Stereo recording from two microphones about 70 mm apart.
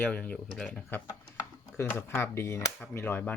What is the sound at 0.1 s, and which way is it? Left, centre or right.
Speech, centre.